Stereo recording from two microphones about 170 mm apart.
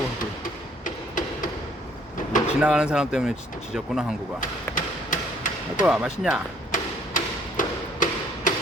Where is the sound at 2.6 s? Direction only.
5° right (ahead or behind).